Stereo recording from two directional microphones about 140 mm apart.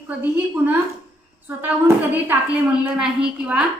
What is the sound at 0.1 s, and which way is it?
Speech, 15° right (ahead or behind).